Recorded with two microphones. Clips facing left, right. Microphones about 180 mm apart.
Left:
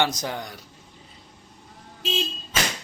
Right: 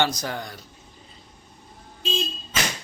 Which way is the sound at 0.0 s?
20° left (ahead or behind).